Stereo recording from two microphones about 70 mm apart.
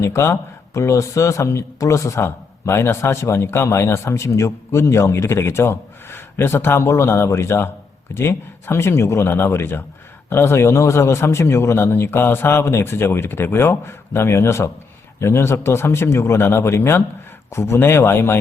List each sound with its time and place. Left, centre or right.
0.0 s speech: left
2.2 s a man's voice: left